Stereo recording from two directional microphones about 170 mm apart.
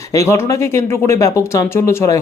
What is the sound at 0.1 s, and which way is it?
Speech, 20° left (ahead or behind).